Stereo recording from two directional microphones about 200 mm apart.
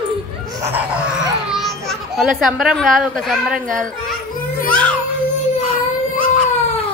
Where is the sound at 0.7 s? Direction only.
5° right (ahead or behind).